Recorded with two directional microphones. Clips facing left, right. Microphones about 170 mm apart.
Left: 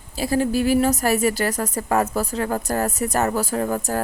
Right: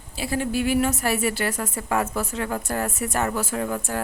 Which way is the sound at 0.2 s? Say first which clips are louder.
Left 4 dB; 40° left (ahead or behind).